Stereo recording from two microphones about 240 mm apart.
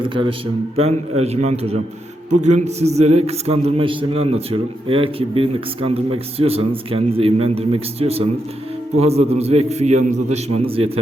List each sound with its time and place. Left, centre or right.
0.0 s a man's voice: right